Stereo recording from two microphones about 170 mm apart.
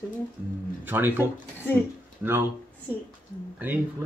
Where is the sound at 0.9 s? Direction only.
10° right (ahead or behind).